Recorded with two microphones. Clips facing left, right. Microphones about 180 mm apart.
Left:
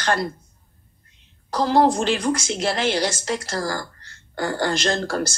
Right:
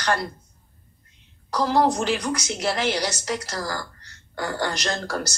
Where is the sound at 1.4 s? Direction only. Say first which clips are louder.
Left 3 dB; 30° left (ahead or behind).